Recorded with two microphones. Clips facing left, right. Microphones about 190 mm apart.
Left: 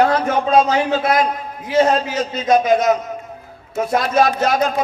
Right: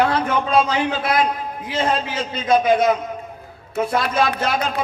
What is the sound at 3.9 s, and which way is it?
Speech, 50° left (ahead or behind).